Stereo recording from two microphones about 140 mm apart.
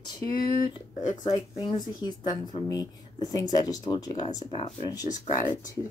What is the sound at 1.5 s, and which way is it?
Speech, 40° left (ahead or behind).